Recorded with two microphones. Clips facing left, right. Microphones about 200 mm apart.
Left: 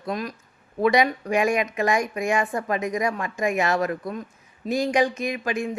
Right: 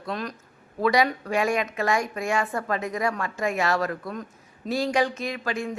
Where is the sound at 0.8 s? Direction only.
20° left (ahead or behind).